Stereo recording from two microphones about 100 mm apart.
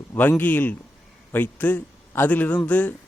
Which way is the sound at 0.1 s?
20° left (ahead or behind).